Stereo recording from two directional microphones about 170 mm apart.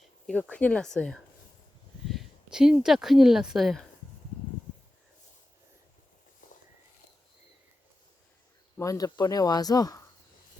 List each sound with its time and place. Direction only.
0.3 s speech: 5° left (ahead or behind)
6.4 s a sound: 50° left (ahead or behind)
8.8 s speech: 20° left (ahead or behind)